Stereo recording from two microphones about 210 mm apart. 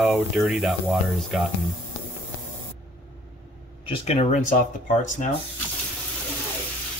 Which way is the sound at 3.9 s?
30° left (ahead or behind).